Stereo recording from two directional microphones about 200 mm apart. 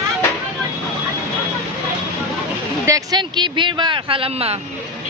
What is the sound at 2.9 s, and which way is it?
Speech, 20° right (ahead or behind).